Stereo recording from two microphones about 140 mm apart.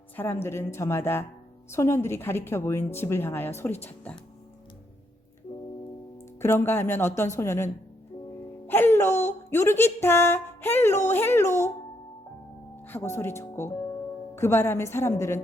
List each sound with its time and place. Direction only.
0.2 s a woman's voice: 15° left (ahead or behind)
6.4 s a woman's voice: 15° left (ahead or behind)
12.9 s speech: 15° left (ahead or behind)